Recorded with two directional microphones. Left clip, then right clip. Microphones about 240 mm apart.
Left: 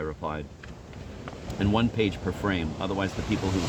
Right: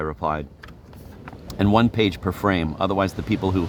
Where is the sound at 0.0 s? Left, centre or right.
Right.